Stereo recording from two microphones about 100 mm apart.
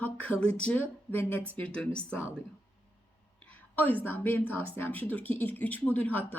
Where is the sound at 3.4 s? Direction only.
15° left (ahead or behind).